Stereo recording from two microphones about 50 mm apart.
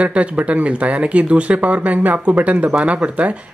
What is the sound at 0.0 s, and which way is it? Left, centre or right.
Speech, right.